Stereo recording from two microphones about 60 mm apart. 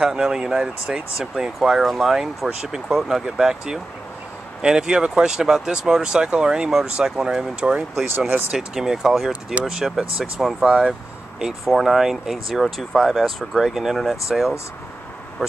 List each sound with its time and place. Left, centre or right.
0.0 s speech: centre
9.3 s speech: right
9.7 s speech: centre